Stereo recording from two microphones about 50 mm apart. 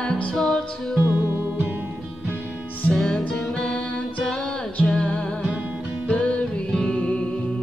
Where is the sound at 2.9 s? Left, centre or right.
Centre.